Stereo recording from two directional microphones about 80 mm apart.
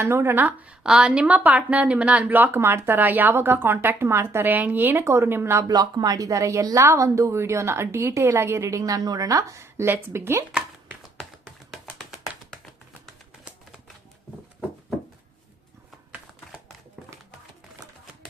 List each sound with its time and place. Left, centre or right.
0.0 s a woman's voice: right
5.6 s a woman's voice: right
8.8 s a woman's voice: right
11.7 s a sound: centre